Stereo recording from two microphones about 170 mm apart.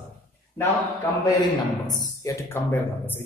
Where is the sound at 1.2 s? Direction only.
25° left (ahead or behind).